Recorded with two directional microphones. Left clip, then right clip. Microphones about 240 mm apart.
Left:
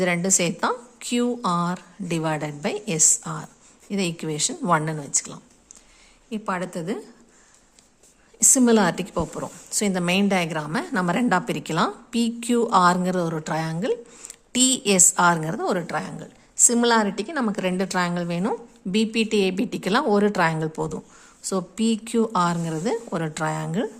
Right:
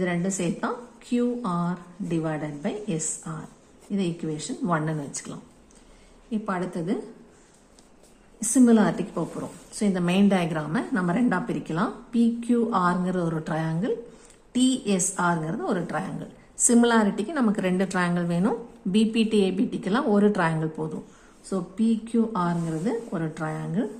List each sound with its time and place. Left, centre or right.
0.0 s a woman's voice: left
8.4 s a woman's voice: left